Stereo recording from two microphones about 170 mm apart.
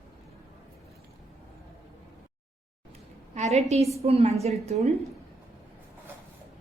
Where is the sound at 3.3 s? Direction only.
40° right (ahead or behind).